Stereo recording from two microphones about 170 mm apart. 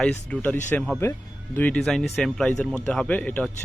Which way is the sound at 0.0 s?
10° left (ahead or behind).